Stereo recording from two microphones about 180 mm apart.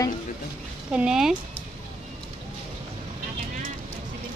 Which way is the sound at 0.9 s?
5° right (ahead or behind).